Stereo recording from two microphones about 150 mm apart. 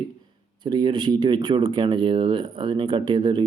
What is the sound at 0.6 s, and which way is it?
Speech, 30° right (ahead or behind).